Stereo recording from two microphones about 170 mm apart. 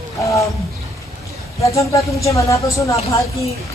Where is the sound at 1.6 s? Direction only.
20° left (ahead or behind).